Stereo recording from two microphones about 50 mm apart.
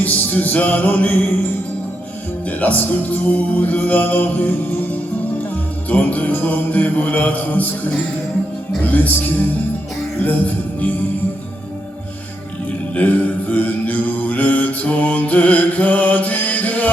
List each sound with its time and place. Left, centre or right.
0.0 s mantra: left
2.5 s mantra: left
5.9 s mantra: left
10.2 s music: left
12.9 s mantra: left